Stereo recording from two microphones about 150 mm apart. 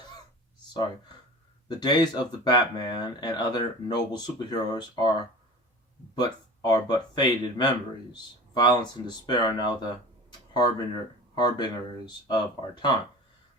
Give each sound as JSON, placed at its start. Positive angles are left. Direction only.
{"t": 1.6, "sound": "speech", "side_deg": 30}
{"t": 6.1, "sound": "speech", "side_deg": 25}